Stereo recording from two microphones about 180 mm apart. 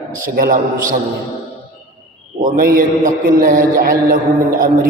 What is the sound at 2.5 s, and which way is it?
A man's voice, 55° right (ahead or behind).